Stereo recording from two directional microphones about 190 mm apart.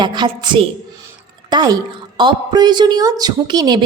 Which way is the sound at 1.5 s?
20° right (ahead or behind).